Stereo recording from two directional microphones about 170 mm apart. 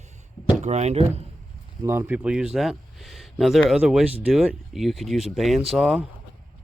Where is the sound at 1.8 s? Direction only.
15° right (ahead or behind).